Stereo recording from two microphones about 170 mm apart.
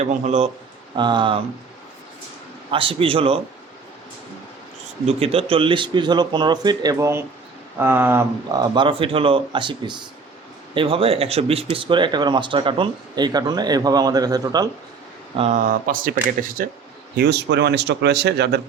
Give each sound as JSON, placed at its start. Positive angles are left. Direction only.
{"t": 0.0, "sound": "a man's voice", "side_deg": -40}
{"t": 0.9, "sound": "speech", "side_deg": -25}
{"t": 2.7, "sound": "a man's voice", "side_deg": -30}
{"t": 5.0, "sound": "speech", "side_deg": -35}
{"t": 8.7, "sound": "speech", "side_deg": -30}
{"t": 15.4, "sound": "a man's voice", "side_deg": -40}
{"t": 15.9, "sound": "a man's voice", "side_deg": -55}
{"t": 17.2, "sound": "speech", "side_deg": -80}